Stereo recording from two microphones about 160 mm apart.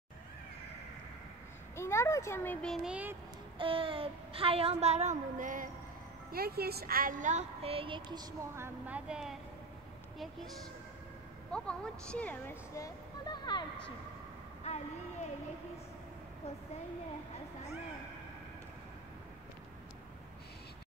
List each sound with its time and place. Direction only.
1.8 s speech: 15° left (ahead or behind); by 3.2 s 10° right (ahead or behind)
3.5 s a woman's voice: 35° right (ahead or behind); by 5.7 s 55° right (ahead or behind)
6.3 s a woman's voice: 75° right (ahead or behind); by 10.5 s centre (ahead or behind)
11.5 s speech: 5° left (ahead or behind); by 13.7 s 25° left (ahead or behind)